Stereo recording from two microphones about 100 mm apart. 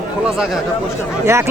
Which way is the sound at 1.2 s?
30° right (ahead or behind).